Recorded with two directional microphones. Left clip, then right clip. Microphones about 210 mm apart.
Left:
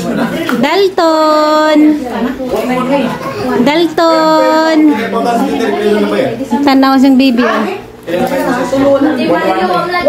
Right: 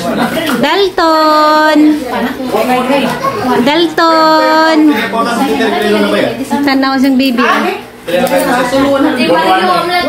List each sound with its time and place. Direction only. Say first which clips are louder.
0.6 s a woman's voice: left 1 dB; 10° left (ahead or behind)
3.6 s a woman's voice: left 1 dB; 5° left (ahead or behind)
6.6 s a woman's voice: left 3 dB; 15° left (ahead or behind)